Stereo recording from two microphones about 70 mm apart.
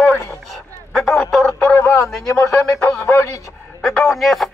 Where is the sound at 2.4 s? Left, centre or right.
Left.